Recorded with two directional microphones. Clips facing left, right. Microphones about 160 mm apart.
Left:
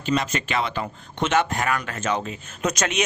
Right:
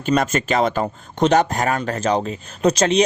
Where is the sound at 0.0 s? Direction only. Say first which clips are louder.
Right 5 dB; 50° right (ahead or behind).